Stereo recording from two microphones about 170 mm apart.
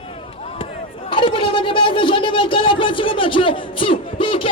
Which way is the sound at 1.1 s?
30° left (ahead or behind).